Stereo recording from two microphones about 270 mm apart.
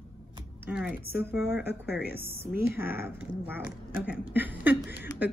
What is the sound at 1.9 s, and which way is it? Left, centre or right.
Speech, left.